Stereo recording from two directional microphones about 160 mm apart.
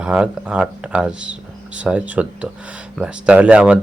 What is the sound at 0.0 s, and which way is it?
Speech, 5° right (ahead or behind).